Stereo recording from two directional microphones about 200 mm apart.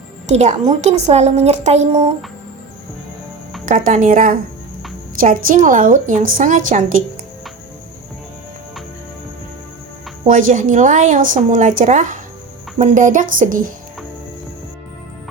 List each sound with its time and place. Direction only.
0.3 s a woman's voice: 35° right (ahead or behind)
3.7 s a woman's voice: 40° right (ahead or behind)
10.2 s a woman's voice: 40° right (ahead or behind)